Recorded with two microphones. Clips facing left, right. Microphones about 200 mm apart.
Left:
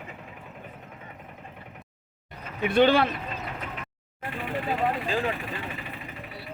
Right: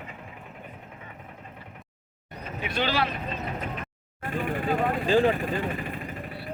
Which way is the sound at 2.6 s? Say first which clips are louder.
Left 8 dB; 55° left (ahead or behind).